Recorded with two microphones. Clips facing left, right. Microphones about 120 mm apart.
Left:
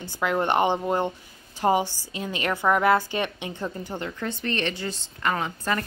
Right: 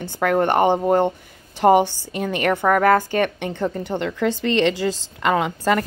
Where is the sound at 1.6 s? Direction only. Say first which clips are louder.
Right 7 dB; 65° right (ahead or behind).